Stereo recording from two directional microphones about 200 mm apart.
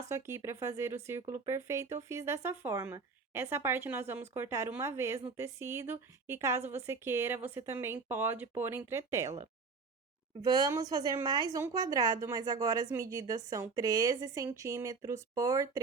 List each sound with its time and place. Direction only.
0.1 s a woman's voice: 15° right (ahead or behind)
10.4 s a woman's voice: 20° right (ahead or behind)